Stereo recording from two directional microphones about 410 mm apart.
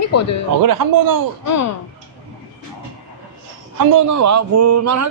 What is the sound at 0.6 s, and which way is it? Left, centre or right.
Speech, right.